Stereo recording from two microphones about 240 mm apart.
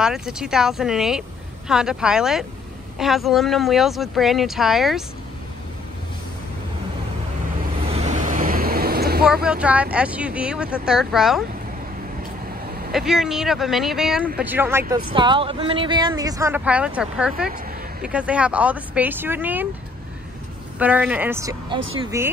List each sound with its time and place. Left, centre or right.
0.0 s speech: centre
7.8 s waves: right
9.2 s speech: centre
12.9 s speech: centre
15.1 s speech: right
20.8 s speech: centre